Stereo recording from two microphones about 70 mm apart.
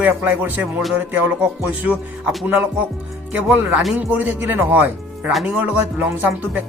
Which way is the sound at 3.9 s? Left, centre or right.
Right.